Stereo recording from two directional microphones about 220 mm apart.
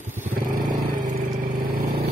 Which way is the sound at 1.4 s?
45° right (ahead or behind).